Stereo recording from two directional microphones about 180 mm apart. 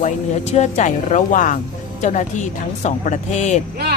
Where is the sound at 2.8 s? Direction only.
40° left (ahead or behind).